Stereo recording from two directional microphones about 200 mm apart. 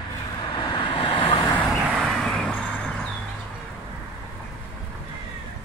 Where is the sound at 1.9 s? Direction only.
Centre (ahead or behind).